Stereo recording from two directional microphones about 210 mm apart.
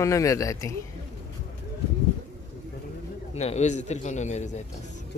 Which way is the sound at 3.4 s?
30° left (ahead or behind).